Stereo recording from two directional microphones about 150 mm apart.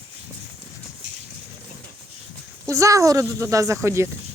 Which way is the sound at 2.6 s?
20° right (ahead or behind).